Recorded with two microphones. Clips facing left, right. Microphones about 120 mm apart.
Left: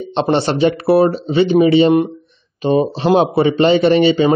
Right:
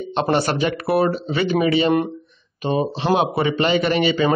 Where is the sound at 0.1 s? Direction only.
25° left (ahead or behind).